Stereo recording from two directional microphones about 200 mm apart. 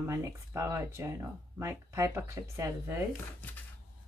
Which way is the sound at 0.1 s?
15° right (ahead or behind).